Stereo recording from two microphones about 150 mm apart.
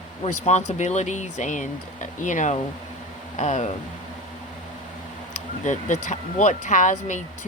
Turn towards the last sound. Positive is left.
turn(degrees=55)  # may be behind; listen again after turning